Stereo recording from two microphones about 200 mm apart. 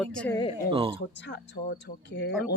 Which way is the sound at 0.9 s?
60° left (ahead or behind).